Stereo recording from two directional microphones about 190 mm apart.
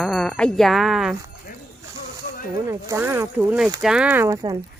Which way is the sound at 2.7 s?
15° right (ahead or behind).